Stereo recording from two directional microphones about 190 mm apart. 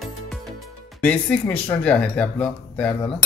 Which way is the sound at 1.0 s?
5° left (ahead or behind).